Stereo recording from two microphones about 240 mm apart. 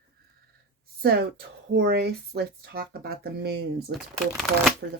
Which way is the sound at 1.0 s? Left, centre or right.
Right.